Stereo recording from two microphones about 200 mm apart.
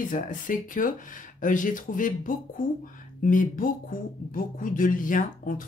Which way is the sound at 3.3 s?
40° left (ahead or behind).